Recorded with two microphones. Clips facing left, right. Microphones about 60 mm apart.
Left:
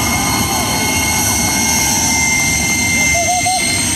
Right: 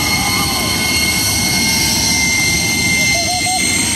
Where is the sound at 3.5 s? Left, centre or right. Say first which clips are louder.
Left 1 dB; centre.